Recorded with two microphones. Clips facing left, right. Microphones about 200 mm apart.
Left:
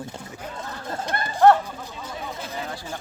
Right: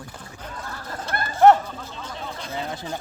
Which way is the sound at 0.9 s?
25° left (ahead or behind).